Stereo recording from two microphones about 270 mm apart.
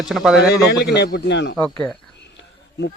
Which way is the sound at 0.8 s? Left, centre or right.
Left.